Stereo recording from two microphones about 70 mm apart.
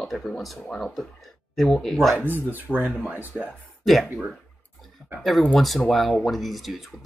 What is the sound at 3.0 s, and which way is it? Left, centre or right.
Speech, right.